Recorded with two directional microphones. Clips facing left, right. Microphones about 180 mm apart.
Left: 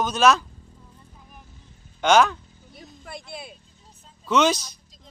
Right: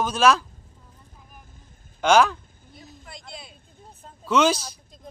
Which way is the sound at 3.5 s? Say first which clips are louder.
Right 5 dB; 55° right (ahead or behind).